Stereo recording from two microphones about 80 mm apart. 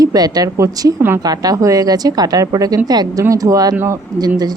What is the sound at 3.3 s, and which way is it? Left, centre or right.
Speech, right.